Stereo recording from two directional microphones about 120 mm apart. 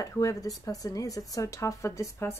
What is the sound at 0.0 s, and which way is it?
Speech, 30° left (ahead or behind).